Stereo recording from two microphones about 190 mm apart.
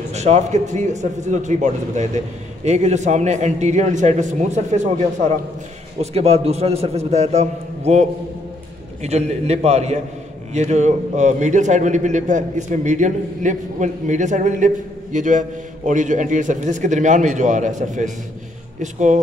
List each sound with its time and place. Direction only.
0.1 s a man's voice: 35° right (ahead or behind)